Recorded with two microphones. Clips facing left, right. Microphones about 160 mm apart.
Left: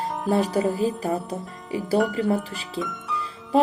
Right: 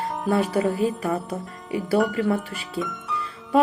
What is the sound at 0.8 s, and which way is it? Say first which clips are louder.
Speech: even; 35° left (ahead or behind).